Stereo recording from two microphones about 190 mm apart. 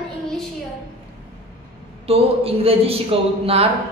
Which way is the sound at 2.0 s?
30° right (ahead or behind).